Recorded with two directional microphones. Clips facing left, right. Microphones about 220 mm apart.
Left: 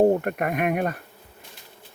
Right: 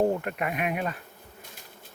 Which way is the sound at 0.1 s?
50° left (ahead or behind).